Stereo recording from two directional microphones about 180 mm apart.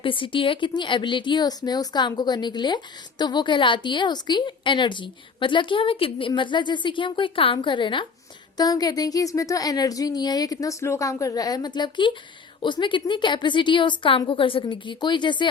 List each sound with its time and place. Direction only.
0.0 s speech: 30° left (ahead or behind)